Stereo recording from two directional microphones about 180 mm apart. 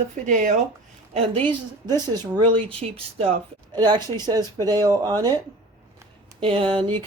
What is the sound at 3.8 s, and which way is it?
Speech, 25° right (ahead or behind).